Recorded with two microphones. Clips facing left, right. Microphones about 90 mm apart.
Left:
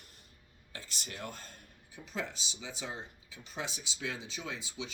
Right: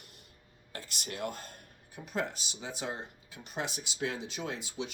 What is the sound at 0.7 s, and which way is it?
Speech, 50° right (ahead or behind).